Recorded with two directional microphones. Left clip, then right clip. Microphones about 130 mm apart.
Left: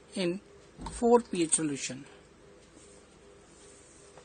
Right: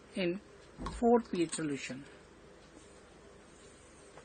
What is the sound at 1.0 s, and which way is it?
Speech, 75° left (ahead or behind).